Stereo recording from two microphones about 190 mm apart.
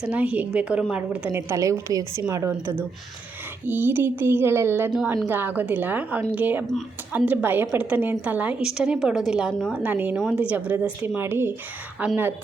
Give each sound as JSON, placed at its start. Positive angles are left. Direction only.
{"t": 0.0, "sound": "a woman's voice", "side_deg": -5}